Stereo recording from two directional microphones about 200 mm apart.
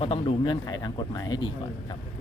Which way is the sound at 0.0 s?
25° left (ahead or behind).